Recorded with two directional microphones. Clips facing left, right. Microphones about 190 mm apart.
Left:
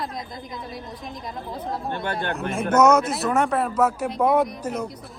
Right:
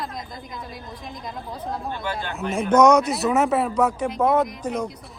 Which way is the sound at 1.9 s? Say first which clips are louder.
Left 2 dB; 60° left (ahead or behind).